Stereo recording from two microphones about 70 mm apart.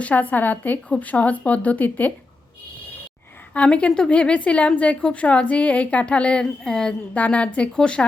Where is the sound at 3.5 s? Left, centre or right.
Centre.